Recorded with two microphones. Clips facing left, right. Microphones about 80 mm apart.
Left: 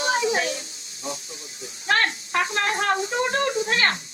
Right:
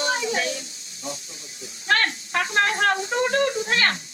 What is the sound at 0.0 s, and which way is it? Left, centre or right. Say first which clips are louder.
A child's voice: left 2 dB; left.